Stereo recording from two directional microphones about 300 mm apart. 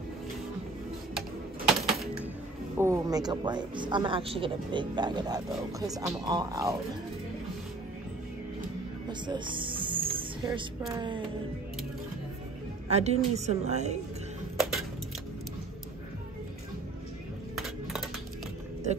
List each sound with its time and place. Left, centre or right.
1.7 s typewriter: centre
2.8 s a woman's voice: centre
9.2 s music: centre
10.8 s a woman's voice: centre
12.9 s a woman's voice: right